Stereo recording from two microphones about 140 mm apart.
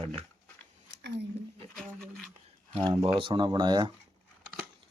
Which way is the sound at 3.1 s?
35° right (ahead or behind).